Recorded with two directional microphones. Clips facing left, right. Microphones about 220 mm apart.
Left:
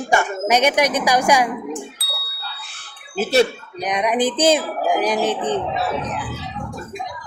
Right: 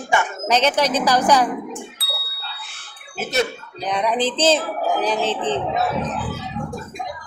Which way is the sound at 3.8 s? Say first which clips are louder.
Left 2 dB; 15° left (ahead or behind).